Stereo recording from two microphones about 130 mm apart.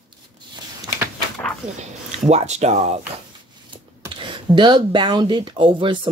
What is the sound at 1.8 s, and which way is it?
Speech, 60° right (ahead or behind).